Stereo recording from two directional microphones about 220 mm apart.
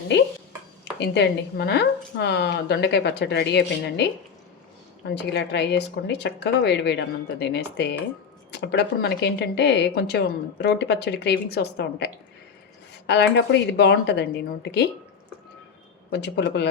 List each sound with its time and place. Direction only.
0.9 s speech: 50° left (ahead or behind)
16.0 s speech: 50° left (ahead or behind)